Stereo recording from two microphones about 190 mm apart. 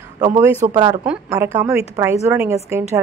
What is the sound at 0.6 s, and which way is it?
Speech, 40° right (ahead or behind).